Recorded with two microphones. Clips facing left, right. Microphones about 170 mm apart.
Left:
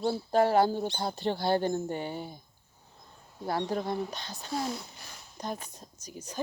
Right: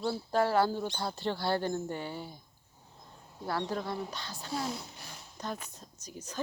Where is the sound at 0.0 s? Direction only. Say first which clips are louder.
Left 4 dB; 20° left (ahead or behind).